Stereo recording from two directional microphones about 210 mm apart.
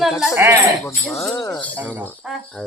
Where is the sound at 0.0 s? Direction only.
Centre (ahead or behind).